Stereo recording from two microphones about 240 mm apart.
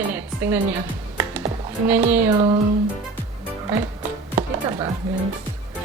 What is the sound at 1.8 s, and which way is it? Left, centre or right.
Speech, centre.